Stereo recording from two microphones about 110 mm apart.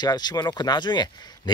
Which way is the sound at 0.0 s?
40° left (ahead or behind).